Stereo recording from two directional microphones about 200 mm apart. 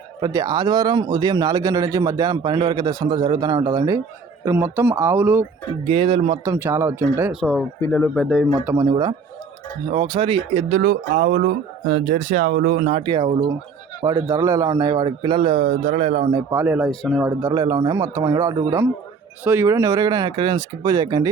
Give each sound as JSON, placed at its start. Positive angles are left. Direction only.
{"t": 0.2, "sound": "speech", "side_deg": -20}
{"t": 5.8, "sound": "speech", "side_deg": -25}
{"t": 6.4, "sound": "speech", "side_deg": -15}
{"t": 7.8, "sound": "speech", "side_deg": 10}
{"t": 8.6, "sound": "speech", "side_deg": -15}
{"t": 13.0, "sound": "speech", "side_deg": -25}
{"t": 16.3, "sound": "speech", "side_deg": -10}
{"t": 16.9, "sound": "speech", "side_deg": 5}
{"t": 17.2, "sound": "speech", "side_deg": -15}